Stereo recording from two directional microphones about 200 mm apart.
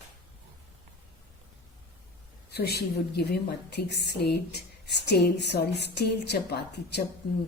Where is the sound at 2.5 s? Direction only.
55° left (ahead or behind).